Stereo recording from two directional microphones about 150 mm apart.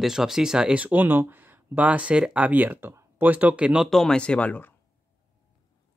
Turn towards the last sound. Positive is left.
turn(degrees=10)  # may be behind; listen again after turning